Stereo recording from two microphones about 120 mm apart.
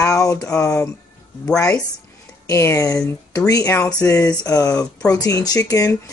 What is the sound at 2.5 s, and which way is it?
Speech, 25° left (ahead or behind).